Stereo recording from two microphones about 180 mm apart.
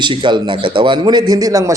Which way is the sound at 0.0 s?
25° right (ahead or behind).